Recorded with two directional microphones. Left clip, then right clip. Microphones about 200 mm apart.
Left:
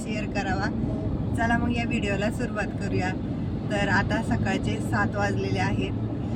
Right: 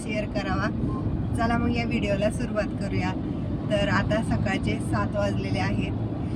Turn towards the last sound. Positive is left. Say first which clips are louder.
# left 1 dB
turn(degrees=-20)  # may be behind; listen again after turning